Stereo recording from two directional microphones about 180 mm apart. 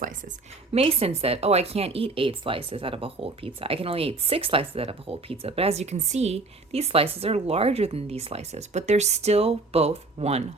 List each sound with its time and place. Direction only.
0.7 s speech: 35° right (ahead or behind)